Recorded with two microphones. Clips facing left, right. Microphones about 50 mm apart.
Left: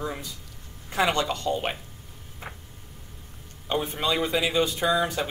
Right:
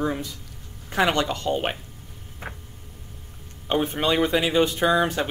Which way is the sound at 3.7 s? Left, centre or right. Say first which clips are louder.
Right 4 dB; right.